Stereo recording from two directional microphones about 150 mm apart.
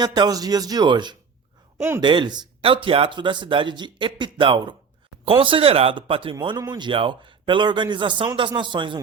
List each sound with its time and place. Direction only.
0.0 s speech: 30° right (ahead or behind)